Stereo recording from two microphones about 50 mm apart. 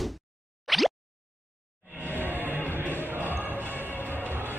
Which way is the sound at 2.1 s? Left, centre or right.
Right.